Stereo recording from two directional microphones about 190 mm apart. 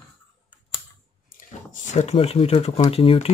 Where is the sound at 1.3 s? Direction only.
40° left (ahead or behind).